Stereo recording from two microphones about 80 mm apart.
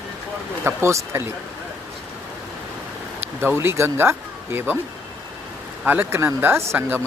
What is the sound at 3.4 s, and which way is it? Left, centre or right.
Speech, right.